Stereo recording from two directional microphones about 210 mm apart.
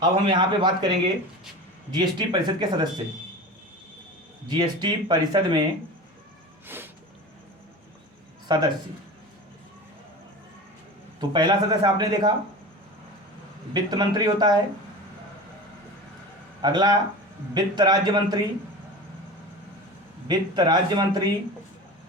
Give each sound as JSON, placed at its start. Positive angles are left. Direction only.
{"t": 0.0, "sound": "speech", "side_deg": -20}
{"t": 4.4, "sound": "speech", "side_deg": -20}
{"t": 6.7, "sound": "a sound", "side_deg": -10}
{"t": 8.5, "sound": "speech", "side_deg": -20}
{"t": 11.2, "sound": "speech", "side_deg": -20}
{"t": 13.7, "sound": "speech", "side_deg": -20}
{"t": 16.6, "sound": "speech", "side_deg": -20}
{"t": 20.2, "sound": "speech", "side_deg": -20}